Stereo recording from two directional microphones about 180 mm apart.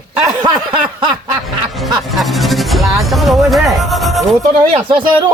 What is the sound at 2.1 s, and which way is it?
Speech, centre (ahead or behind).